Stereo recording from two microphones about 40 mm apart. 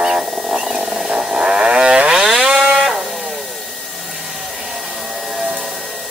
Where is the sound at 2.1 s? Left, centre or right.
Centre.